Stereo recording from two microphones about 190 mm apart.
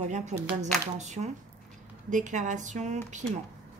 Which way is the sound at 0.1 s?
40° right (ahead or behind).